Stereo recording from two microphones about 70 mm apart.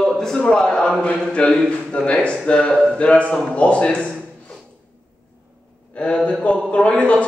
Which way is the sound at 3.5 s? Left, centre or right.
Centre.